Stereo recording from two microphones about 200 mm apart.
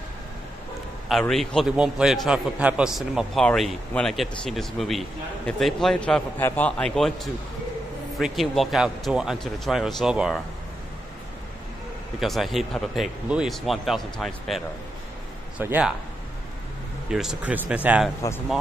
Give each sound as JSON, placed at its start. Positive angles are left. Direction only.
{"t": 1.2, "sound": "a man's voice", "side_deg": 0}
{"t": 8.2, "sound": "a man's voice", "side_deg": 0}
{"t": 12.2, "sound": "a man's voice", "side_deg": 0}
{"t": 17.1, "sound": "a man's voice", "side_deg": -5}